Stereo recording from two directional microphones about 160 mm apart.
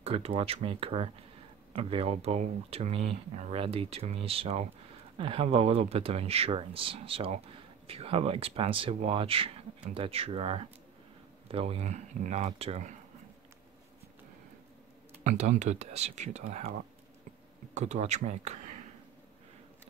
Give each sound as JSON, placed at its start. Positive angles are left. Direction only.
{"t": 0.0, "sound": "speech", "side_deg": -40}
{"t": 15.2, "sound": "speech", "side_deg": -45}
{"t": 17.7, "sound": "speech", "side_deg": -50}